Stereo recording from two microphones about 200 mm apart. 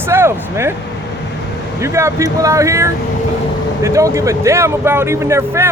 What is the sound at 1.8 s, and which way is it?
A man's voice, 15° right (ahead or behind).